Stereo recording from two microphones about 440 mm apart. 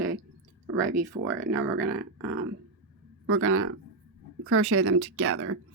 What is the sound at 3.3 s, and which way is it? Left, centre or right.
Speech, right.